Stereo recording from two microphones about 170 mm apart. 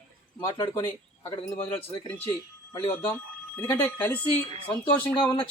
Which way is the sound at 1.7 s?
10° left (ahead or behind).